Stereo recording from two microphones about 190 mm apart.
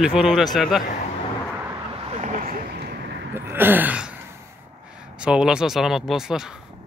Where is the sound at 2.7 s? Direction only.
60° right (ahead or behind).